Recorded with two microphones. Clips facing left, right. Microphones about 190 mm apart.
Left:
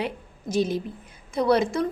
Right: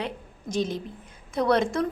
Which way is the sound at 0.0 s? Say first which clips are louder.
Left 3 dB; 5° left (ahead or behind).